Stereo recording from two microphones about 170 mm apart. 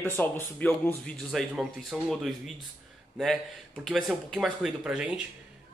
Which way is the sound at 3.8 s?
Centre (ahead or behind).